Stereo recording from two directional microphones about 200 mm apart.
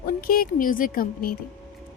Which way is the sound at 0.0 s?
45° left (ahead or behind).